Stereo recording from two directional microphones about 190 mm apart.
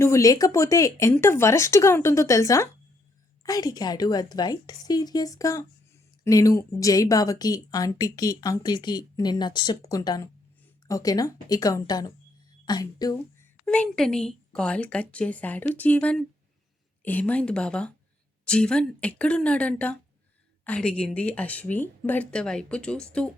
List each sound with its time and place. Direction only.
0.0 s a woman's voice: 15° left (ahead or behind)
13.7 s a woman's voice: 5° left (ahead or behind)